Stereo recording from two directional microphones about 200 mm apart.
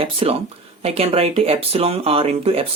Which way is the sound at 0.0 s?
30° right (ahead or behind).